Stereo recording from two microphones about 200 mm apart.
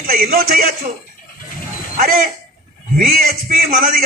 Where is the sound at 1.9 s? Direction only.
45° right (ahead or behind).